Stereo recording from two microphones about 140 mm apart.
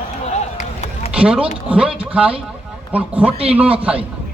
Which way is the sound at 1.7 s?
5° right (ahead or behind).